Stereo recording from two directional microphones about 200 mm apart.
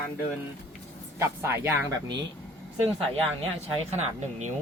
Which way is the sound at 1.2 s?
15° right (ahead or behind).